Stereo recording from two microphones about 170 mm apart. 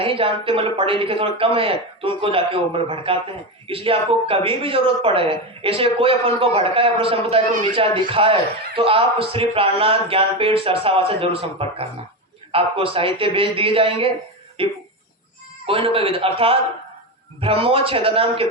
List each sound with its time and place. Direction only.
0.0 s speech: 30° right (ahead or behind)